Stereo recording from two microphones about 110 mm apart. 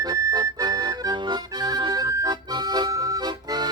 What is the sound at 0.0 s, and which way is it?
Accordion, 30° right (ahead or behind).